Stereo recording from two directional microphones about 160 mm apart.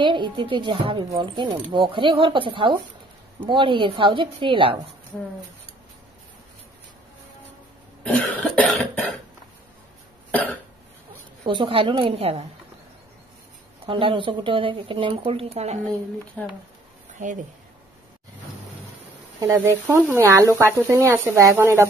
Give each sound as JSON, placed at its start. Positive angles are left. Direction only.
{"t": 0.0, "sound": "speech", "side_deg": -30}
{"t": 8.0, "sound": "cough", "side_deg": 5}
{"t": 10.3, "sound": "cough", "side_deg": 10}
{"t": 11.4, "sound": "speech", "side_deg": -35}
{"t": 13.8, "sound": "speech", "side_deg": -35}
{"t": 16.4, "sound": "cough", "side_deg": 10}
{"t": 19.4, "sound": "speech", "side_deg": -15}